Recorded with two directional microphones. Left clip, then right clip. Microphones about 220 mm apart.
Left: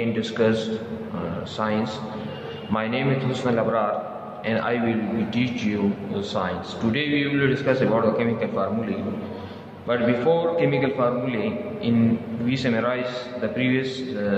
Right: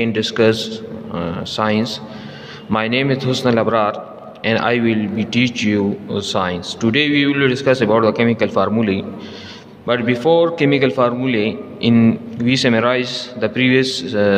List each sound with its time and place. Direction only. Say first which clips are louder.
0.0 s a man's voice: right 7 dB; 45° right (ahead or behind)